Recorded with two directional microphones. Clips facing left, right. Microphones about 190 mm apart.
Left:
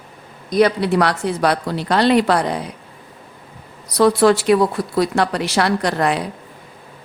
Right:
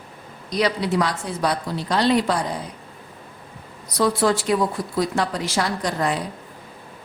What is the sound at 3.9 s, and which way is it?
A woman's voice, 70° left (ahead or behind).